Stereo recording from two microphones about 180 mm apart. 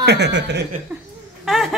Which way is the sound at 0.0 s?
70° right (ahead or behind).